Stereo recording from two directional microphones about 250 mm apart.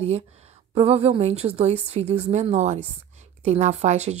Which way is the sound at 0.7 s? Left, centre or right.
Right.